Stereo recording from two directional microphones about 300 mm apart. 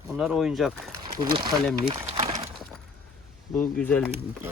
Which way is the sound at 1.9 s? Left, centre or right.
Right.